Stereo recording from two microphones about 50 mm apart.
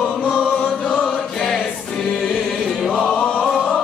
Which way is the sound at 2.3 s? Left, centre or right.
Centre.